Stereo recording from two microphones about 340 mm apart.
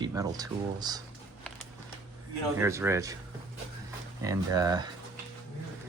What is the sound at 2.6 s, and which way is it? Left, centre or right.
Speech, centre.